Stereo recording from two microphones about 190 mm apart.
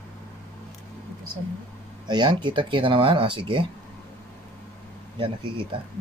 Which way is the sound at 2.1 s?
25° right (ahead or behind).